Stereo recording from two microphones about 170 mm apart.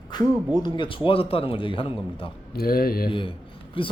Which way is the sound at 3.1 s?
30° left (ahead or behind).